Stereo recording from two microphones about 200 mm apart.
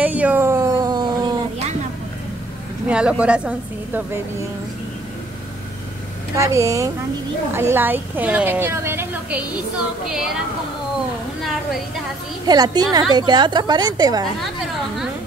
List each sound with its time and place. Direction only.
0.0 s a sound: 10° right (ahead or behind)
2.9 s a woman's voice: 5° right (ahead or behind)
6.3 s a woman's voice: 15° right (ahead or behind)
11.4 s a woman's voice: centre (ahead or behind)
12.4 s a woman's voice: 20° right (ahead or behind)